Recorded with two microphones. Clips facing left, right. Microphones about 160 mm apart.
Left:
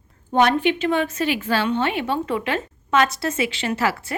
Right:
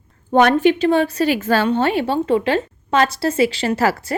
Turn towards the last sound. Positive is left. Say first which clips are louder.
# right 5 dB
turn(degrees=-40)  # may be behind; listen again after turning